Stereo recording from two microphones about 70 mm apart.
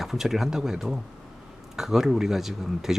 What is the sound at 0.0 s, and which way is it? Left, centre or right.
Speech, centre.